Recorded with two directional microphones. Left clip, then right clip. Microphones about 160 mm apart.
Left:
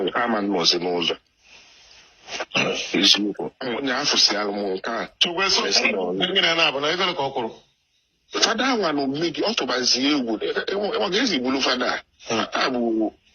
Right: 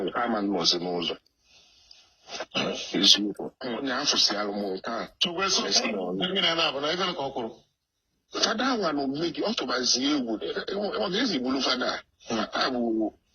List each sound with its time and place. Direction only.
0.0 s a man's voice: 20° left (ahead or behind)
2.2 s a man's voice: 20° left (ahead or behind)